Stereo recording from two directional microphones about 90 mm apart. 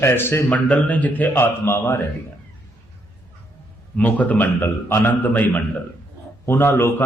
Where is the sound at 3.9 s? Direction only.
15° left (ahead or behind).